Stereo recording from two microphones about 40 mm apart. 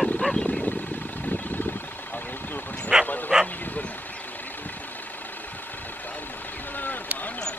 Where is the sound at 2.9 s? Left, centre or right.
Centre.